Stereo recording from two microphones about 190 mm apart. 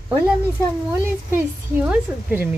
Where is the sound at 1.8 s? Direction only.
10° right (ahead or behind).